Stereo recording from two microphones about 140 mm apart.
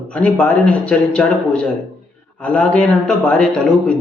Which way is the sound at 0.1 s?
10° left (ahead or behind).